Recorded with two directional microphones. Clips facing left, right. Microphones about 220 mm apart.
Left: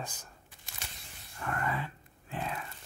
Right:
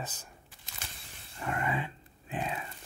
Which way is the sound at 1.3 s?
20° right (ahead or behind).